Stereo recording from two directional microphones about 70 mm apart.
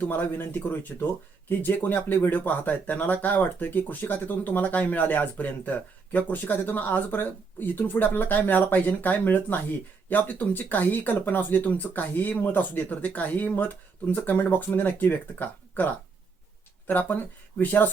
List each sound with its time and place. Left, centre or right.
0.0 s speech: left